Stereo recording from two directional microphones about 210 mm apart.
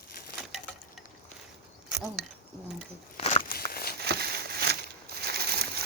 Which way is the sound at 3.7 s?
45° left (ahead or behind).